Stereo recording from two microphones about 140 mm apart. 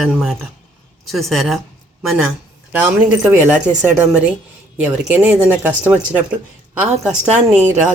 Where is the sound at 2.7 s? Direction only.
10° right (ahead or behind).